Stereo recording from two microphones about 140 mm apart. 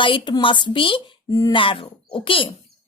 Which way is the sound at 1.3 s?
25° left (ahead or behind).